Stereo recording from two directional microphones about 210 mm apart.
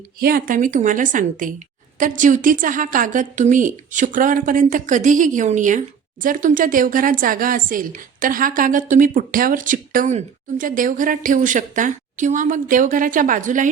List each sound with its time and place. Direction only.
0.2 s speech: 45° right (ahead or behind)